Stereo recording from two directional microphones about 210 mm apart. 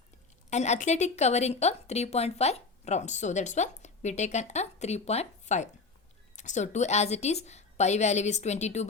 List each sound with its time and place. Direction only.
0.5 s a woman's voice: 35° left (ahead or behind)